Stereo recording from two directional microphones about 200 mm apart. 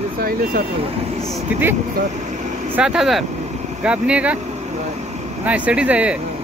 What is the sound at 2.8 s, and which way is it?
Speech, 5° right (ahead or behind).